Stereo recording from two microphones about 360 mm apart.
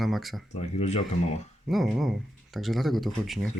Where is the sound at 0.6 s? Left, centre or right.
Centre.